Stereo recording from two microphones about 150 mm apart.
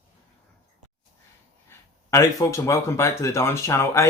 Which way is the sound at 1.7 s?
20° left (ahead or behind).